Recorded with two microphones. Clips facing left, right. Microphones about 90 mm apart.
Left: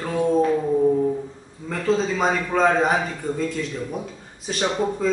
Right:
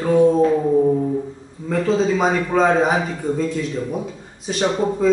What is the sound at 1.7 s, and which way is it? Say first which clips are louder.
A man's voice: right 4 dB; 5° right (ahead or behind).